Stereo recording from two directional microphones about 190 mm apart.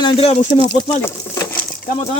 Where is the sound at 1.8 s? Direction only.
45° left (ahead or behind).